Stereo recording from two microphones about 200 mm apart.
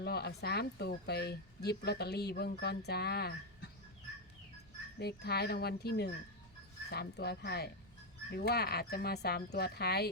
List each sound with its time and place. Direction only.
0.0 s speech: 55° left (ahead or behind)
4.9 s speech: 55° left (ahead or behind)